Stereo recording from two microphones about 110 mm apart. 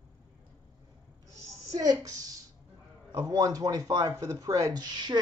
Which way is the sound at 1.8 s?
30° right (ahead or behind).